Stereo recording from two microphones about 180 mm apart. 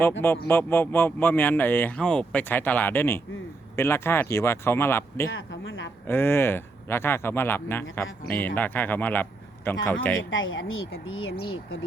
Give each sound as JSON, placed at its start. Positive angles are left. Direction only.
{"t": 0.4, "sound": "speech", "side_deg": 10}
{"t": 5.3, "sound": "a sound", "side_deg": 90}
{"t": 6.1, "sound": "speech", "side_deg": 10}
{"t": 10.2, "sound": "speech", "side_deg": 90}